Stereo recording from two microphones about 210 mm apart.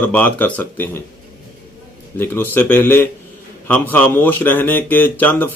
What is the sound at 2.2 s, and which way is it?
Speech, 10° left (ahead or behind).